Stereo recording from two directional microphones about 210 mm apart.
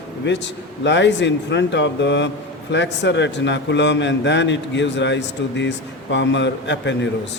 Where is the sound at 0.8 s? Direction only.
55° left (ahead or behind).